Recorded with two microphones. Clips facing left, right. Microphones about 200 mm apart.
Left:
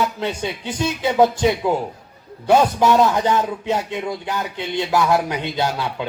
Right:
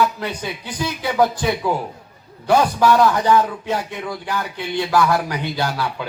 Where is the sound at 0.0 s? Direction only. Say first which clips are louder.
Right 1 dB; 25° left (ahead or behind).